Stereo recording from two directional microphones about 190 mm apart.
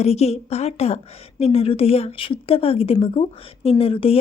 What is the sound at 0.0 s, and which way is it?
A woman's voice, 35° left (ahead or behind).